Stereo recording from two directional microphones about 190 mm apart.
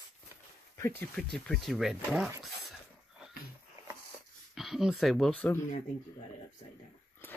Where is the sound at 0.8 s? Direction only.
10° left (ahead or behind).